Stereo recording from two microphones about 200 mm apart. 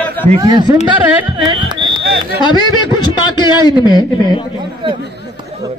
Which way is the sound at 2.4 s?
20° left (ahead or behind).